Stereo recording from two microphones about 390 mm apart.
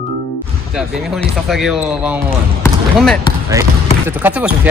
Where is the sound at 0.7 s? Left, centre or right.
Centre.